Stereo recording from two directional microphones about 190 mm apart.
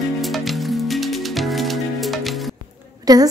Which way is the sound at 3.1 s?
20° right (ahead or behind).